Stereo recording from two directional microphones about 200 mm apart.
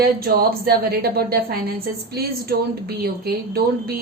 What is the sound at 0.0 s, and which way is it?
A woman's voice, 50° right (ahead or behind).